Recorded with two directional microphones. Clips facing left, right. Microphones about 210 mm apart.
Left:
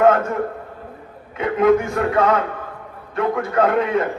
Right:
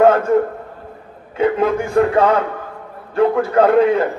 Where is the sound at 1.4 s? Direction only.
30° right (ahead or behind).